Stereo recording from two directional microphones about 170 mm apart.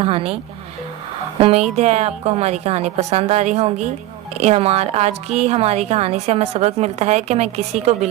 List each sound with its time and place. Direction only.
0.0 s a woman's voice: 35° right (ahead or behind)
1.4 s a woman's voice: 35° right (ahead or behind)